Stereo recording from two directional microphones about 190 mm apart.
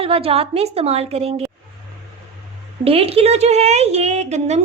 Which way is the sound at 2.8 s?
30° right (ahead or behind).